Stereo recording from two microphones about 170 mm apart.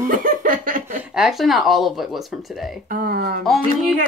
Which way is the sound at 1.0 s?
5° right (ahead or behind).